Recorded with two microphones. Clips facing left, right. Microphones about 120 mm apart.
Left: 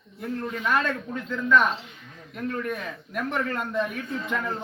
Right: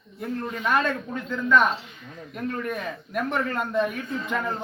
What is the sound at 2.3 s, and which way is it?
Speech, 15° right (ahead or behind).